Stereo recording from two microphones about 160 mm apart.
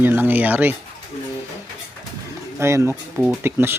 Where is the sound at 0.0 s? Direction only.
15° right (ahead or behind).